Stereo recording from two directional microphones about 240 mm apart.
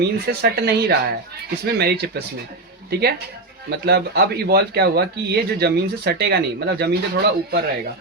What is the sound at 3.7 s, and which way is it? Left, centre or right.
Speech, right.